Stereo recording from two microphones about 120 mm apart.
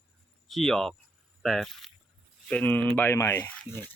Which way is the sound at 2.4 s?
10° left (ahead or behind).